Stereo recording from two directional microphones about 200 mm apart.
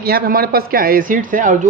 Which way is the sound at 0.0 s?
50° right (ahead or behind).